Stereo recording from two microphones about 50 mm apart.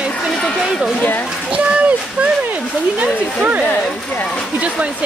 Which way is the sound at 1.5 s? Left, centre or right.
Right.